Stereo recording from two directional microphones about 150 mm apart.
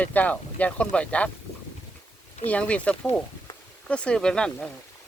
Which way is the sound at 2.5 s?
10° left (ahead or behind).